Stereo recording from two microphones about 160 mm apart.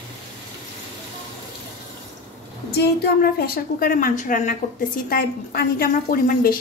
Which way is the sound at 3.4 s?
65° left (ahead or behind).